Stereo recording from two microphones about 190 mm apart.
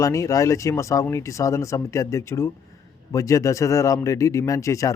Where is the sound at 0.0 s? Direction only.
15° left (ahead or behind).